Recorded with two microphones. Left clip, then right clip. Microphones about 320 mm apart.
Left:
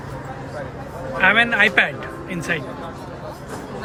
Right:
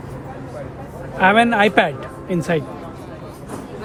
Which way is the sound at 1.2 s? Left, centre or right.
Centre.